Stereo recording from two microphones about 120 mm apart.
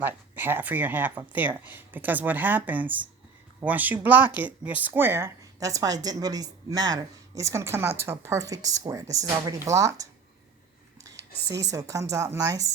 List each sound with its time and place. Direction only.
0.0 s speech: 15° right (ahead or behind)